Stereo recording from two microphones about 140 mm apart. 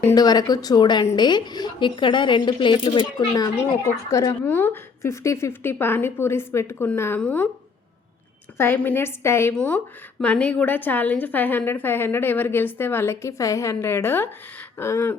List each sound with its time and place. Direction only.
0.1 s a woman's voice: 30° left (ahead or behind); by 7.5 s 10° left (ahead or behind)
8.5 s a woman's voice: 15° left (ahead or behind)